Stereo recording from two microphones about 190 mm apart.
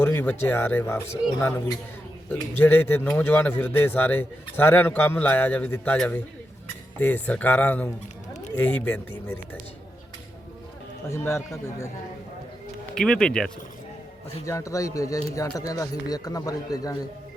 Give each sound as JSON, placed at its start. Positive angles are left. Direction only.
{"t": 0.0, "sound": "a man's voice", "side_deg": 10}
{"t": 8.3, "sound": "a sound", "side_deg": 40}
{"t": 8.5, "sound": "a man's voice", "side_deg": 10}
{"t": 11.0, "sound": "a man's voice", "side_deg": 15}
{"t": 12.9, "sound": "speech", "side_deg": 5}
{"t": 14.4, "sound": "a man's voice", "side_deg": 15}